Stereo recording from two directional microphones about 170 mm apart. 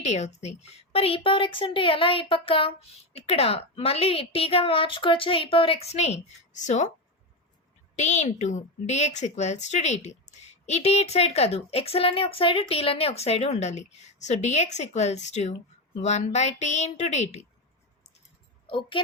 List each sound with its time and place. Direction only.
0.0 s a woman's voice: 40° left (ahead or behind)
7.9 s a woman's voice: 45° left (ahead or behind)
18.7 s speech: 30° left (ahead or behind)